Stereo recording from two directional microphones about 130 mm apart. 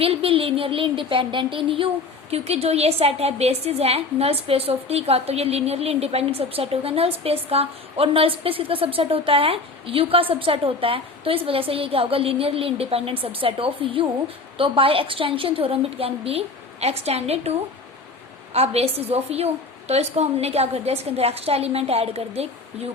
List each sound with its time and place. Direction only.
0.0 s a woman's voice: 45° right (ahead or behind)